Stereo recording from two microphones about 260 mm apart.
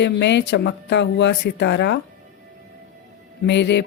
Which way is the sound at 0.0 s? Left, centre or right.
Left.